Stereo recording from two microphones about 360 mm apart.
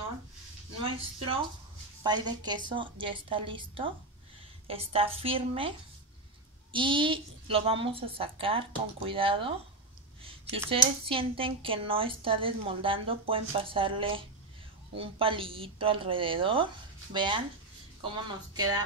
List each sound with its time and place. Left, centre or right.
2.0 s speech: centre
6.7 s speech: centre